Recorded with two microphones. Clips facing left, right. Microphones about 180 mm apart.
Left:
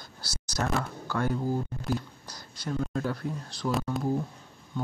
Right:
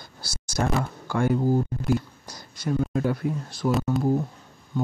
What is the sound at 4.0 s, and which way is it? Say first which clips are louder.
Speech: right 5 dB; 25° right (ahead or behind).